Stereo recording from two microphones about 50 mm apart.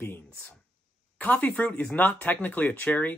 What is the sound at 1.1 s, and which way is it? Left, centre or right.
Speech, left.